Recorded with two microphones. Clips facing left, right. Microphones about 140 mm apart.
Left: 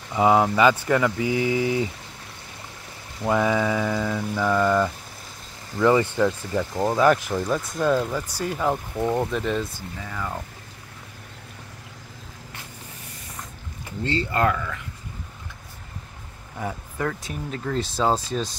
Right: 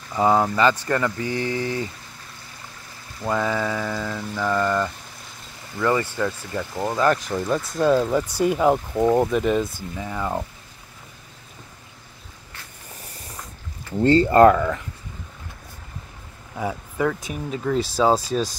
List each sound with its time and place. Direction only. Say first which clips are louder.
0.1 s mantra: left 1 dB; 10° left (ahead or behind)
3.2 s mantra: left 2 dB; 15° left (ahead or behind)
7.4 s speech: right 4 dB; centre (ahead or behind)
8.1 s speech: right 7 dB; 20° right (ahead or behind)
13.9 s speech: right 10 dB; 45° right (ahead or behind)
16.5 s speech: right 4 dB; 10° right (ahead or behind)